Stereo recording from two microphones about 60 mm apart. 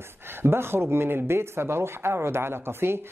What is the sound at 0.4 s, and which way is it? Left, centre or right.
Speech, right.